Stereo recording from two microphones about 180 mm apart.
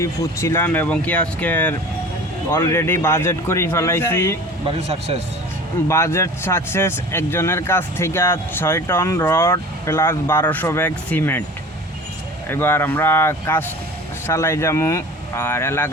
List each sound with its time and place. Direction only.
0.0 s speech: 15° left (ahead or behind)
4.9 s speech: 35° right (ahead or behind)
5.9 s speech: 15° left (ahead or behind)
12.5 s speech: 10° left (ahead or behind)